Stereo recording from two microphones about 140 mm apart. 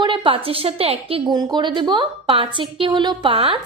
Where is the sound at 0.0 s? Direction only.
35° right (ahead or behind).